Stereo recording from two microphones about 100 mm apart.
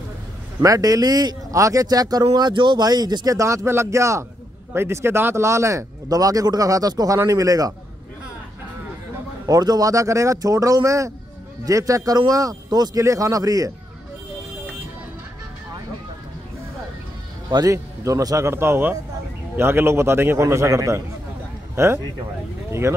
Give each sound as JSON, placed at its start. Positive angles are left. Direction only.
{"t": 0.6, "sound": "speech", "side_deg": -35}
{"t": 2.3, "sound": "speech", "side_deg": -50}
{"t": 9.5, "sound": "speech", "side_deg": -40}
{"t": 17.5, "sound": "a man's voice", "side_deg": -35}